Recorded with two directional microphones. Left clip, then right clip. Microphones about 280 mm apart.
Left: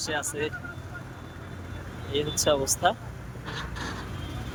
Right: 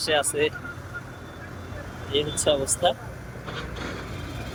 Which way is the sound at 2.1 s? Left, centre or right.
Centre.